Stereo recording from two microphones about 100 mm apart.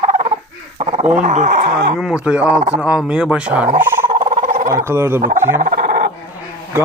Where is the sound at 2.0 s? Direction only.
5° right (ahead or behind).